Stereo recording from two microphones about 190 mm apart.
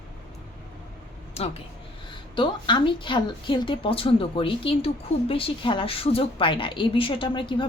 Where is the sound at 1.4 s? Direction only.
30° left (ahead or behind).